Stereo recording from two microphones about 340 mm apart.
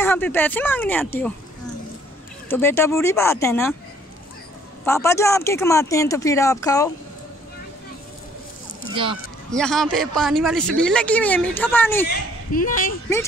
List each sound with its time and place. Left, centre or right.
0.0 s speech: centre
2.4 s speech: centre
4.8 s speech: centre
8.9 s speech: centre
9.6 s speech: centre
12.1 s speech: left